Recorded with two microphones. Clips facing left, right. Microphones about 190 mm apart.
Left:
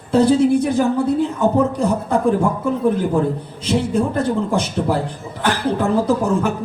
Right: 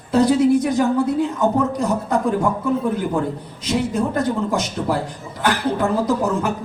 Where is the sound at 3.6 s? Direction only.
30° left (ahead or behind).